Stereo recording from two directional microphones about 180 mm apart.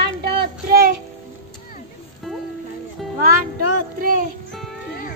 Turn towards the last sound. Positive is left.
turn(degrees=-50)  # may be behind; listen again after turning